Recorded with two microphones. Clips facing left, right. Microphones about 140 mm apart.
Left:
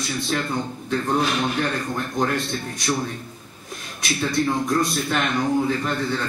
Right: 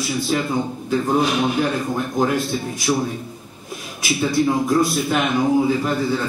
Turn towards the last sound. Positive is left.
turn(degrees=-5)  # may be behind; listen again after turning